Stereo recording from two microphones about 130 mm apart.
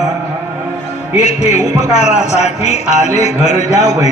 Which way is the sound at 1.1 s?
60° left (ahead or behind).